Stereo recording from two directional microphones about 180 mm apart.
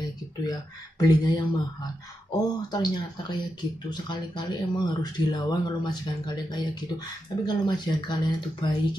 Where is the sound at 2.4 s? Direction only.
20° left (ahead or behind).